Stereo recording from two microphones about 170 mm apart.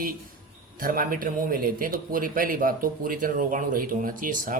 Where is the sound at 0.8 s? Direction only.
55° right (ahead or behind).